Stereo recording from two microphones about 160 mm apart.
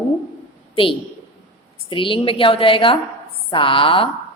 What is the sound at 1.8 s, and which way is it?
A woman's voice, 30° left (ahead or behind).